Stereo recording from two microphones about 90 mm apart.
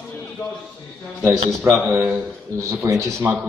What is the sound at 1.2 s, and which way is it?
Speech, 25° right (ahead or behind).